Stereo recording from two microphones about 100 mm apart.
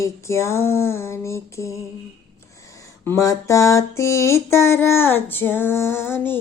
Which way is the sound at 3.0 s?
30° left (ahead or behind).